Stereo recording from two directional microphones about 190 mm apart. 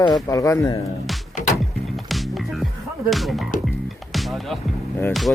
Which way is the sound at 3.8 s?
Centre (ahead or behind).